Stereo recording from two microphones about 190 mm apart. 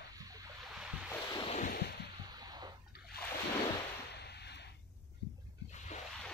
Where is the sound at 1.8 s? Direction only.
60° left (ahead or behind).